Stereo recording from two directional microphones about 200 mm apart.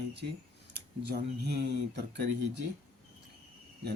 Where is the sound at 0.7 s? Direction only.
55° right (ahead or behind).